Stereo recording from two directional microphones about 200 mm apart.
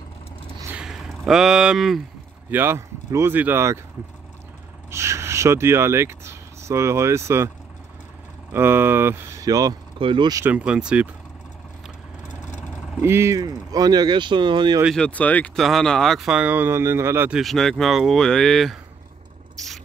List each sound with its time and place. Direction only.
0.6 s a sound: 10° right (ahead or behind)
2.5 s speech: 10° right (ahead or behind)
4.9 s speech: 15° right (ahead or behind)
8.5 s speech: 10° right (ahead or behind)
10.4 s speech: 5° right (ahead or behind)
13.0 s speech: 10° right (ahead or behind)
15.0 s speech: 5° left (ahead or behind)
19.5 s a sound: centre (ahead or behind)